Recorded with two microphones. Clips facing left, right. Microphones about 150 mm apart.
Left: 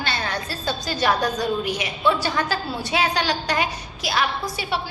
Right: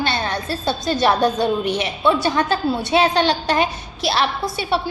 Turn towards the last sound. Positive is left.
turn(degrees=-25)  # may be behind; listen again after turning